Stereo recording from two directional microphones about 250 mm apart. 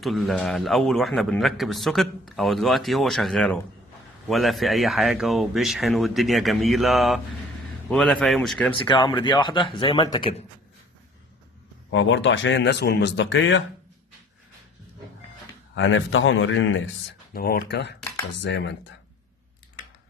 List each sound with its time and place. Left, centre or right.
0.0 s a man's voice: centre
8.7 s speech: left
11.9 s speech: left
15.7 s speech: left